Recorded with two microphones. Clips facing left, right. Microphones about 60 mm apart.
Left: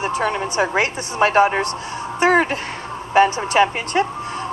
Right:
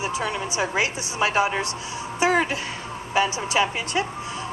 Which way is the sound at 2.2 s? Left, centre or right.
Left.